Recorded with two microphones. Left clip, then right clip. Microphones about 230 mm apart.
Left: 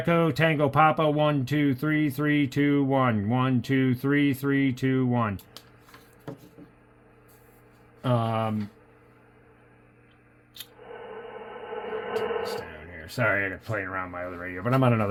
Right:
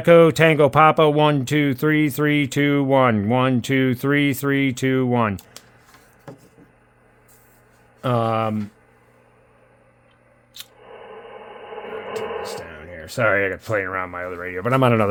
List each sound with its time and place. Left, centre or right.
0.0 s speech: right
8.0 s speech: right
10.8 s a sound: centre
12.7 s speech: right